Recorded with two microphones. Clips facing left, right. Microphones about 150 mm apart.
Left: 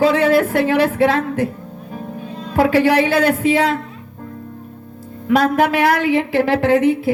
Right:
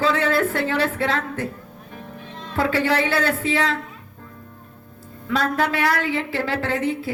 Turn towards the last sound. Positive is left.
turn(degrees=15)  # may be behind; listen again after turning